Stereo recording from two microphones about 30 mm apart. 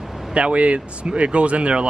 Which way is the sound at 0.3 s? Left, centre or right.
Right.